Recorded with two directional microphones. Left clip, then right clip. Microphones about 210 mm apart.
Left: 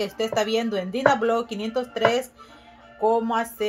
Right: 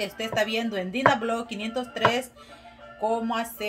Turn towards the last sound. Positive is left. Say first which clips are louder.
# left 5 dB
turn(degrees=25)  # may be behind; listen again after turning